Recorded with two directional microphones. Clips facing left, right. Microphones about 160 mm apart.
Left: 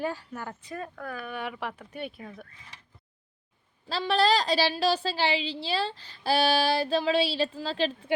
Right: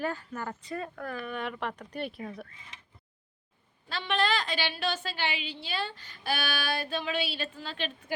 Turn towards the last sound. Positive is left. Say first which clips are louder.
# left 8 dB
turn(degrees=35)  # may be behind; listen again after turning